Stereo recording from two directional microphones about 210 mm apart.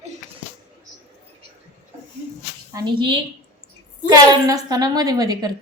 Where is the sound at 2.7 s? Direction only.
20° right (ahead or behind).